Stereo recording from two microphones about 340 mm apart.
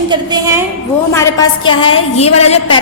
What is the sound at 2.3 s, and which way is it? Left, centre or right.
Speech, left.